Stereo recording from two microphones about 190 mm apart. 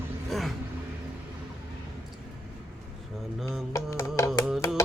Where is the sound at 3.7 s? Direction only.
15° left (ahead or behind).